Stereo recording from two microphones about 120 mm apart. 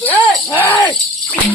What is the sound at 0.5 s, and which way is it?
Speech, 15° left (ahead or behind).